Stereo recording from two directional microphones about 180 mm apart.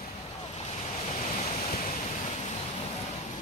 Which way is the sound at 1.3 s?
35° left (ahead or behind).